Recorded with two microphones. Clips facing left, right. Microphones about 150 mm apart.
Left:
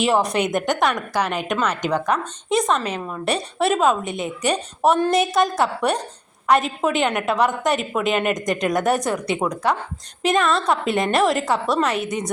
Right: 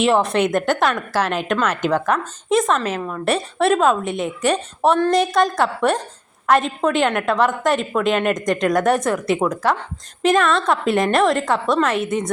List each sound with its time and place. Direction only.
0.0 s a woman's voice: centre (ahead or behind)
0.5 s a woman's voice: 15° left (ahead or behind)
0.8 s a woman's voice: centre (ahead or behind)